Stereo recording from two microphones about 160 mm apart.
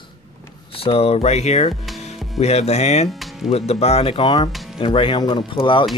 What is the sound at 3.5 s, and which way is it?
Speech, 40° left (ahead or behind).